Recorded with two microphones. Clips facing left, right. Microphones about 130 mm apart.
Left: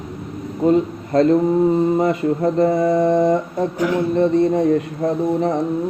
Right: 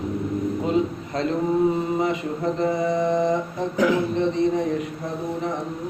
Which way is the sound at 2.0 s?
45° left (ahead or behind).